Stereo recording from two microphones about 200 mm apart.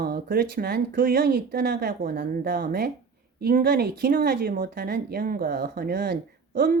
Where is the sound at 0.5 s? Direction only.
50° right (ahead or behind).